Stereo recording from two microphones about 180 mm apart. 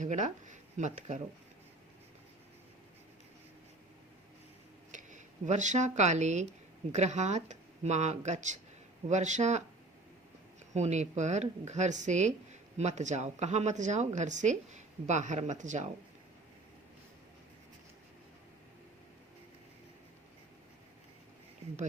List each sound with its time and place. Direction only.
0.0 s speech: 40° right (ahead or behind)
4.9 s speech: 45° right (ahead or behind)
10.8 s speech: 40° right (ahead or behind)